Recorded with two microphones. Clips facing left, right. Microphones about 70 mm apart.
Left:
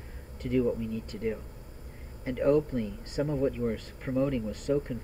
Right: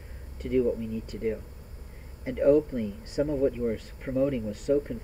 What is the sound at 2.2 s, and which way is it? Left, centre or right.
Speech, centre.